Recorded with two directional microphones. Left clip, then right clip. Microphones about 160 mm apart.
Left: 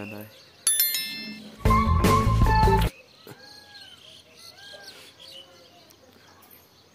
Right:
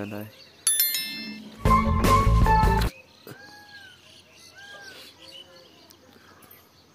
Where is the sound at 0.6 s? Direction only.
Centre (ahead or behind).